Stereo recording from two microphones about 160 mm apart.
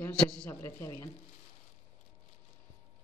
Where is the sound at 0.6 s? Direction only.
15° left (ahead or behind).